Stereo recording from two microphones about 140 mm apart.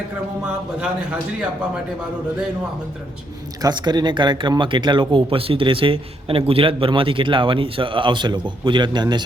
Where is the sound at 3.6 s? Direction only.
30° right (ahead or behind).